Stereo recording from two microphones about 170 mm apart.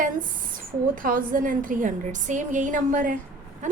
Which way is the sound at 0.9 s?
55° right (ahead or behind).